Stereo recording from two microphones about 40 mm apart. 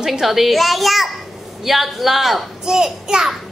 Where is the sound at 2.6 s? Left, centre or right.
Centre.